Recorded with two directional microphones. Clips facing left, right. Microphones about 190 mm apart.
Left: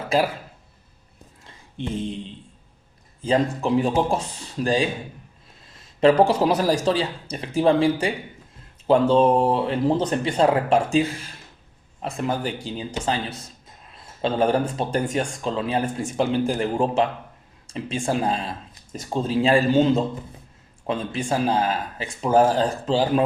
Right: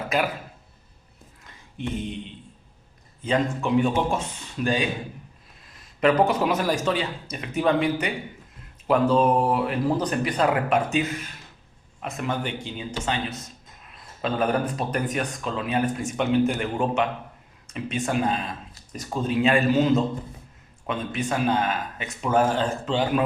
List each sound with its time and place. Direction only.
0.1 s speech: 30° left (ahead or behind)
1.5 s speech: 30° left (ahead or behind)